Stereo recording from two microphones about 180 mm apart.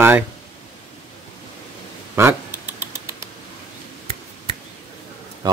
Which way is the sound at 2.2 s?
15° right (ahead or behind).